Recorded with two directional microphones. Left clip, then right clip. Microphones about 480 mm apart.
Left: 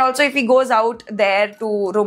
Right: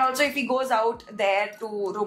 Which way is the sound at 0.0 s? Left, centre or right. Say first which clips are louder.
Left 7 dB; left.